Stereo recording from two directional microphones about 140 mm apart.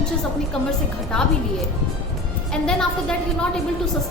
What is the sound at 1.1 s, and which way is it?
Speech, 5° left (ahead or behind).